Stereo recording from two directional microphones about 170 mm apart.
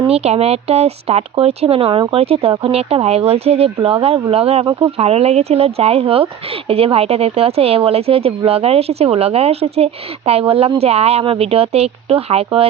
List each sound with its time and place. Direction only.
0.0 s speech: 35° right (ahead or behind)